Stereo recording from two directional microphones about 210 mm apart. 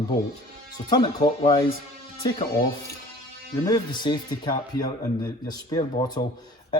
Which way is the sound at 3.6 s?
20° left (ahead or behind).